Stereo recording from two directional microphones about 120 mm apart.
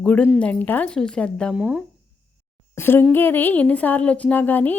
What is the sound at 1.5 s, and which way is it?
Speech, 10° right (ahead or behind).